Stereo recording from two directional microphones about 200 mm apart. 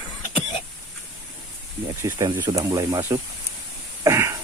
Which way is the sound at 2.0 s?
15° right (ahead or behind).